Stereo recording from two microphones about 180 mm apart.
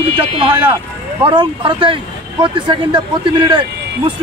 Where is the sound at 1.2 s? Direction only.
25° right (ahead or behind).